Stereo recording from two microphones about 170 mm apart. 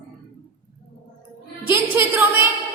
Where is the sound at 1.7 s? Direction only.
15° right (ahead or behind).